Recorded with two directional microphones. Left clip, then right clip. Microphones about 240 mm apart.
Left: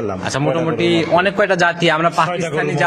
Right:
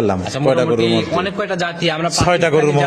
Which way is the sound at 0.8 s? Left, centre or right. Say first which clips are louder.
Left 2 dB; centre.